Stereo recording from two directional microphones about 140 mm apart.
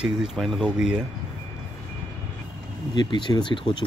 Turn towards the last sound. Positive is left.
turn(degrees=35)  # may be behind; listen again after turning